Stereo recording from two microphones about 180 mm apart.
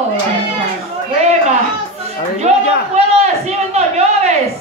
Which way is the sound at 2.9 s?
40° right (ahead or behind).